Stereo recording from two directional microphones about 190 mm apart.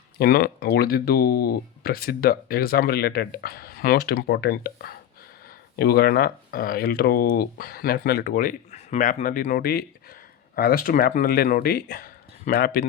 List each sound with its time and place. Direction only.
0.2 s speech: 50° left (ahead or behind)